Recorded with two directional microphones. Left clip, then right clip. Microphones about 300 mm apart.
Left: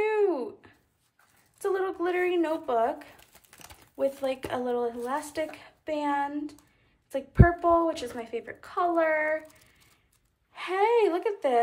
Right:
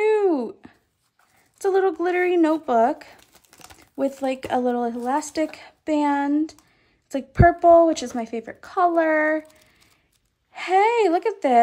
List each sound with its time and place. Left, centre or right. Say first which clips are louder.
0.0 s a sound: right 6 dB; centre
1.6 s speech: right 8 dB; right
10.5 s speech: right 6 dB; right